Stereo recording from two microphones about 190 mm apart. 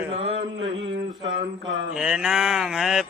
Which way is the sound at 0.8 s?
75° right (ahead or behind).